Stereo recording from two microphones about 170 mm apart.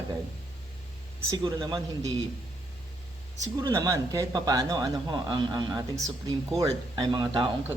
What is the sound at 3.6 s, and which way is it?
Speech, 20° right (ahead or behind).